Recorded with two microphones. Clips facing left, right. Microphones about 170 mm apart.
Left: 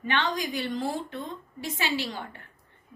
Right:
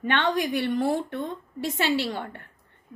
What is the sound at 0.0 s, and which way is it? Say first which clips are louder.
Speech: right 4 dB; 60° right (ahead or behind).